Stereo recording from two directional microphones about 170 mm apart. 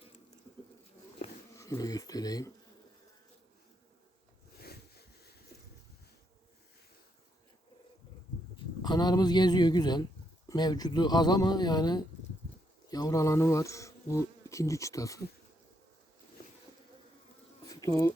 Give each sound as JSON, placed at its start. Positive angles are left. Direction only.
{"t": 1.5, "sound": "speech", "side_deg": 20}
{"t": 4.5, "sound": "a sound", "side_deg": 70}
{"t": 8.5, "sound": "speech", "side_deg": 25}
{"t": 12.9, "sound": "bee", "side_deg": 20}
{"t": 17.7, "sound": "bee", "side_deg": 20}